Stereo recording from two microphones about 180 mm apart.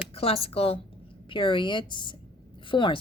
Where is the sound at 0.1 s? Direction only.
30° left (ahead or behind).